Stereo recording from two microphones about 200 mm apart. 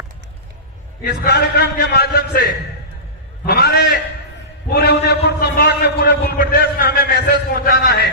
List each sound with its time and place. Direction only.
1.0 s a man's voice: 50° left (ahead or behind)